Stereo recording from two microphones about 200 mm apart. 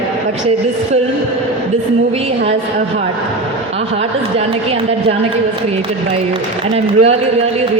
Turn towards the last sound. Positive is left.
turn(degrees=-30)  # may be behind; listen again after turning